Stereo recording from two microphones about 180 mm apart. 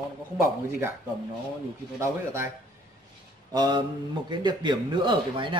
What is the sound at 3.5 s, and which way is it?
Speech, 20° right (ahead or behind).